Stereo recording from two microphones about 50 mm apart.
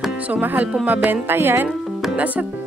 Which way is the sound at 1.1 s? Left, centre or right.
Right.